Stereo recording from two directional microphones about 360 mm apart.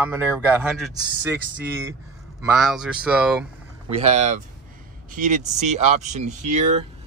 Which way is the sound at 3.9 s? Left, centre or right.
Centre.